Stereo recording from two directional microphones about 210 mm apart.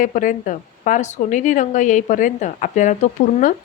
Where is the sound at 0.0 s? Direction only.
40° left (ahead or behind).